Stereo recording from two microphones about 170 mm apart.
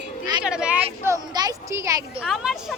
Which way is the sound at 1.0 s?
20° right (ahead or behind).